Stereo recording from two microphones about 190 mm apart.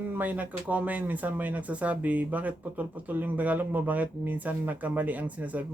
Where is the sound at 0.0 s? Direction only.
10° right (ahead or behind).